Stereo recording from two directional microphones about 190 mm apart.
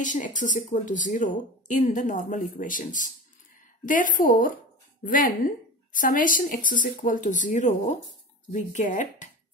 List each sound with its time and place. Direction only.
0.0 s speech: 40° left (ahead or behind)